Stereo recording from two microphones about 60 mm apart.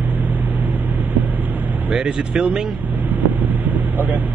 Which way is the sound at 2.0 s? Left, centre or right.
Centre.